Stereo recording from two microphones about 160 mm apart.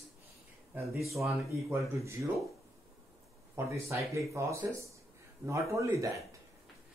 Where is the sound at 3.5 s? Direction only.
15° right (ahead or behind).